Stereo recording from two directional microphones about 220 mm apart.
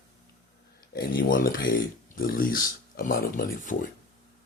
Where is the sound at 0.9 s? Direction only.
40° left (ahead or behind).